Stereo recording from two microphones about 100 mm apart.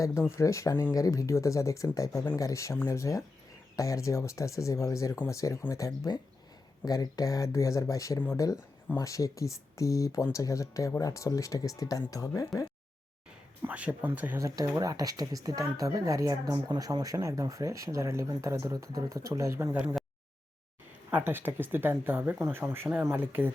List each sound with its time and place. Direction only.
0.3 s speech: 30° left (ahead or behind)
13.6 s speech: 15° right (ahead or behind)
14.3 s speech: 35° right (ahead or behind)
21.1 s speech: 20° right (ahead or behind)